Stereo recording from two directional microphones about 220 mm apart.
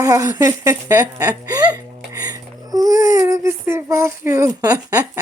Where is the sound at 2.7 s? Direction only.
15° right (ahead or behind).